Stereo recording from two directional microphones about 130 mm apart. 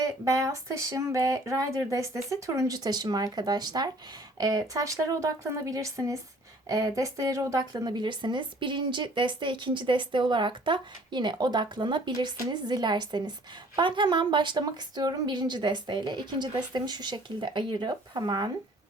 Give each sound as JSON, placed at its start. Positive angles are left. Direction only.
{"t": 0.0, "sound": "a woman's voice", "side_deg": -25}